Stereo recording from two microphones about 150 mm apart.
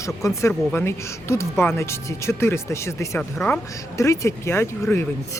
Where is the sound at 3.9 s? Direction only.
20° left (ahead or behind).